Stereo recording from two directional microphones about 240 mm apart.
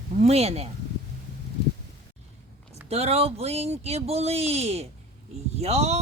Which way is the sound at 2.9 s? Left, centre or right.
Right.